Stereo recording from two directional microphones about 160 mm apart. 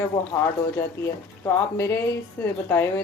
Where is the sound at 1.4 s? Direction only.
15° left (ahead or behind).